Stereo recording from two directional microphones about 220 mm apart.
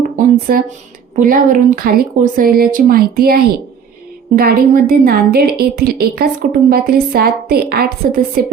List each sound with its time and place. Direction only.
0.2 s speech: 40° right (ahead or behind)
4.4 s a woman's voice: 40° right (ahead or behind)